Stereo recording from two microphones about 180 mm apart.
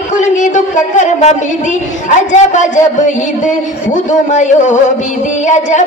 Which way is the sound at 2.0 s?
40° left (ahead or behind).